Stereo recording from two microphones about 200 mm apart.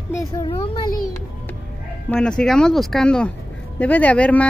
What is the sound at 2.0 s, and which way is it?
Speech, 5° left (ahead or behind).